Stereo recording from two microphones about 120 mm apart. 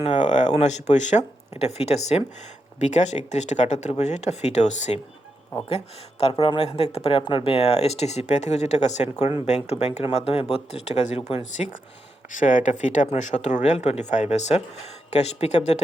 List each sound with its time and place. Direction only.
0.0 s speech: 80° left
2.7 s speech: 80° left
5.6 s speech: 55° left (ahead or behind)
9.5 s speech: 60° left (ahead or behind)
12.3 s speech: 90° left; by 15.8 s 65° left (ahead or behind)